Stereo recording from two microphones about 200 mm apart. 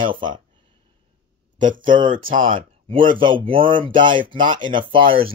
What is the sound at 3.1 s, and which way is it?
Speech, 25° right (ahead or behind).